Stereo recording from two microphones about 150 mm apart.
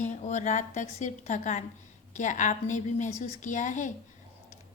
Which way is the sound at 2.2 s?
55° left (ahead or behind).